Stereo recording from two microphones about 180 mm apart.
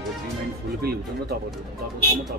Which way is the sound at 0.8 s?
60° right (ahead or behind).